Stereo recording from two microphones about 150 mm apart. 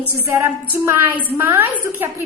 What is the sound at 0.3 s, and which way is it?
A woman's voice, 20° right (ahead or behind).